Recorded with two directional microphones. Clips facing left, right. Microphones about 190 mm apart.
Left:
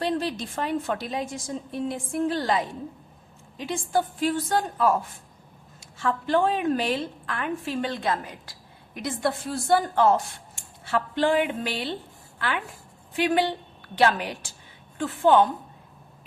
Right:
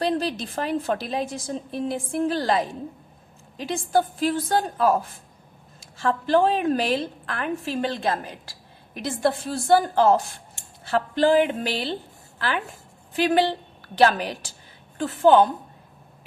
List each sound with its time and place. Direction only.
0.0 s a woman's voice: 35° right (ahead or behind)
13.1 s a woman's voice: 35° right (ahead or behind)
14.9 s a woman's voice: 35° right (ahead or behind)